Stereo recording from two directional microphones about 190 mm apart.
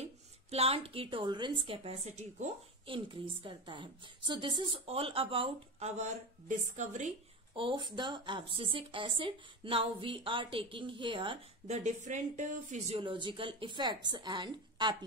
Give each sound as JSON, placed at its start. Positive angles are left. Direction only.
{"t": 0.0, "sound": "a woman's voice", "side_deg": -30}
{"t": 7.5, "sound": "a woman's voice", "side_deg": -25}